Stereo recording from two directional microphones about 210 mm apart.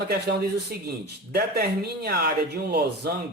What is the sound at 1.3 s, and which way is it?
Speech, 50° right (ahead or behind).